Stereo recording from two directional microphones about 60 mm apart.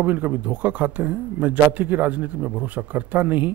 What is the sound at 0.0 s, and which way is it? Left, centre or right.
A man's voice, right.